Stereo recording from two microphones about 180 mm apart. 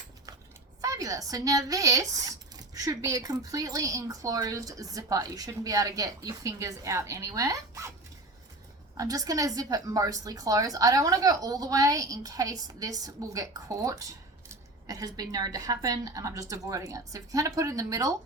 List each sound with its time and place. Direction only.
0.8 s speech: 20° right (ahead or behind)
9.0 s speech: 20° right (ahead or behind)